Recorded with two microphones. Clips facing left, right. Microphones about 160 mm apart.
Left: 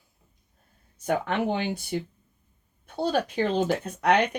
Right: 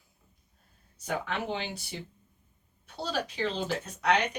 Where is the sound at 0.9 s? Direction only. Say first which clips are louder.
Left 7 dB; 55° left (ahead or behind).